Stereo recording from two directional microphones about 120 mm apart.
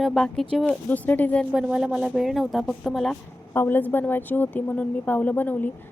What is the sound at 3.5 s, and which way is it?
A woman's voice, 15° left (ahead or behind).